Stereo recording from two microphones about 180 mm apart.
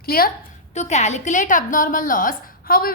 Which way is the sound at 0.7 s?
40° left (ahead or behind).